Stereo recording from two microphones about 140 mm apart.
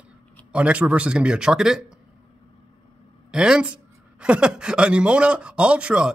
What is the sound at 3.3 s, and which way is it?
A woman's voice, 5° right (ahead or behind).